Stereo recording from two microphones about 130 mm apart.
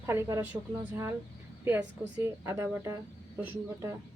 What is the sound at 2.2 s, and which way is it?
Speech, 25° right (ahead or behind).